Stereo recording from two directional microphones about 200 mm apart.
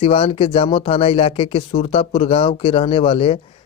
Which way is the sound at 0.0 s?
30° left (ahead or behind).